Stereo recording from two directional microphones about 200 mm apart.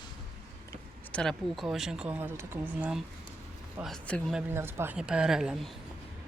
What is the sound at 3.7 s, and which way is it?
Speech, centre (ahead or behind).